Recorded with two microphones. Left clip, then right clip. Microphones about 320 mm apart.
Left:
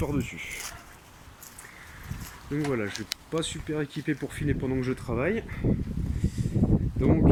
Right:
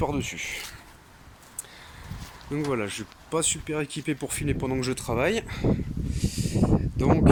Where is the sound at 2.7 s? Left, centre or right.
Centre.